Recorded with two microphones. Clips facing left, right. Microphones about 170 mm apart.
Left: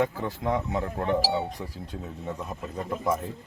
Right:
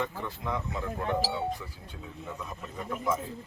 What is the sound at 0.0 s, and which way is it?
Speech, 65° left (ahead or behind).